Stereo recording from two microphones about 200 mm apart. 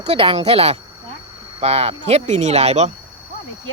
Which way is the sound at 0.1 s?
30° right (ahead or behind).